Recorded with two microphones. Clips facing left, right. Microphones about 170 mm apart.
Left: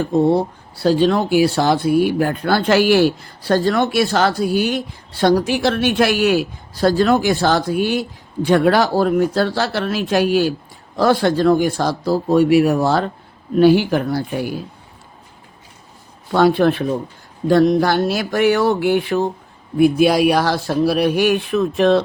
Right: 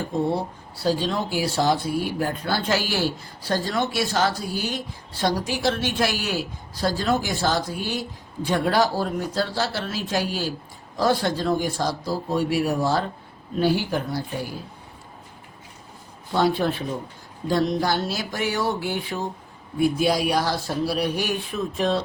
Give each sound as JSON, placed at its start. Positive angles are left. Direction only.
{"t": 0.3, "sound": "speech", "side_deg": 65}
{"t": 16.3, "sound": "speech", "side_deg": 65}